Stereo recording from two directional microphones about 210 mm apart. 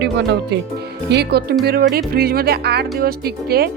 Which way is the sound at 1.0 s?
50° right (ahead or behind).